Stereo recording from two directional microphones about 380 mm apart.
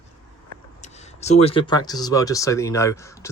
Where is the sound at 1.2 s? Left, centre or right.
Centre.